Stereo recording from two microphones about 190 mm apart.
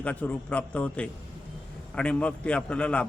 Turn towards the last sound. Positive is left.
turn(degrees=5)  # may be behind; listen again after turning